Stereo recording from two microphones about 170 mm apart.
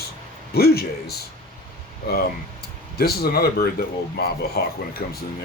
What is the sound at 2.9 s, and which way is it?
Speech, 65° left (ahead or behind).